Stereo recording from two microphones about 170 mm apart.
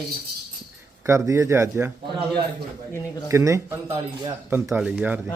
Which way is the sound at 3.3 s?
15° right (ahead or behind).